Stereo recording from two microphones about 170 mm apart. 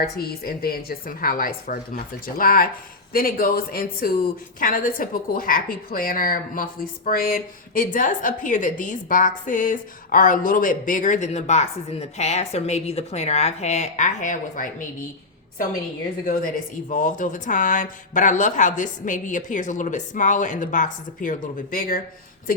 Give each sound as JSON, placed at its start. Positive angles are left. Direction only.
{"t": 0.0, "sound": "a woman's voice", "side_deg": 65}
{"t": 16.2, "sound": "speech", "side_deg": 50}